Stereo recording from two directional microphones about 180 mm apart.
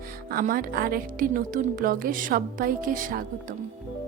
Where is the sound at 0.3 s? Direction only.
55° right (ahead or behind).